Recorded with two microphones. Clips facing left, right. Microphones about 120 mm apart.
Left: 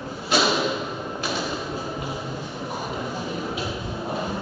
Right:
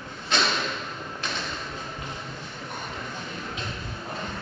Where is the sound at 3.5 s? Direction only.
10° left (ahead or behind).